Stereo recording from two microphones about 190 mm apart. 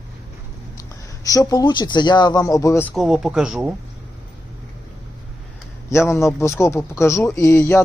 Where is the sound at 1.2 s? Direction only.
20° left (ahead or behind).